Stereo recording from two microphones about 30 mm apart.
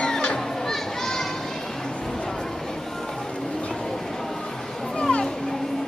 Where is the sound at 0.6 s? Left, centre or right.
Centre.